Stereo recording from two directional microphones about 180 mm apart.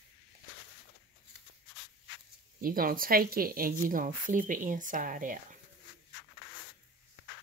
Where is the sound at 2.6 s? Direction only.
50° right (ahead or behind).